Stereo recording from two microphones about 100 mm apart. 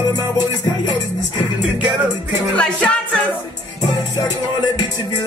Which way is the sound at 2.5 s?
10° left (ahead or behind).